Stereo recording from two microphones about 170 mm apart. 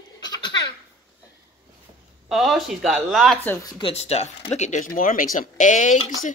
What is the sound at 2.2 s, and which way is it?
Speech, centre (ahead or behind).